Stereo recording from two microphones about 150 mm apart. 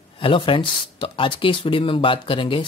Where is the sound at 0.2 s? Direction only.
35° left (ahead or behind).